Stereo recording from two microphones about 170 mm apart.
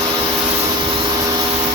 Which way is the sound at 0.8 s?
30° right (ahead or behind).